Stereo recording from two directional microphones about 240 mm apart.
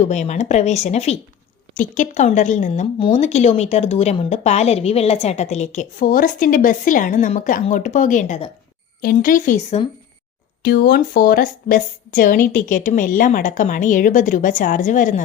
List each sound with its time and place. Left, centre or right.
0.0 s a woman's voice: left
10.6 s a woman's voice: left